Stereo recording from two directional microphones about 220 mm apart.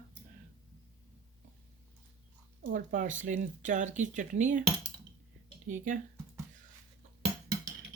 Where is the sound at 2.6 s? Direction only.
35° right (ahead or behind).